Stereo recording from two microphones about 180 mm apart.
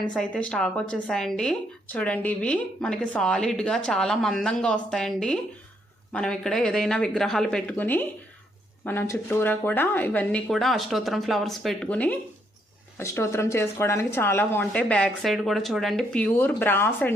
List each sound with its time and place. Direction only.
0.1 s speech: 5° left (ahead or behind)